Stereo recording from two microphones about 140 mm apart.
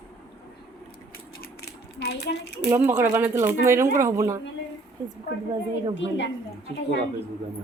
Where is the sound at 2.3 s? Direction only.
90° left.